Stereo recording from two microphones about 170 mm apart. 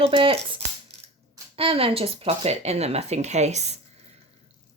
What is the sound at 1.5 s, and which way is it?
Speech, 35° right (ahead or behind).